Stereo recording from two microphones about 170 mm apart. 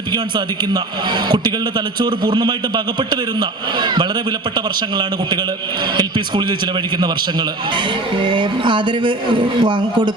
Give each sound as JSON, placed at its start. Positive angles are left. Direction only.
{"t": 0.1, "sound": "a man's voice", "side_deg": -25}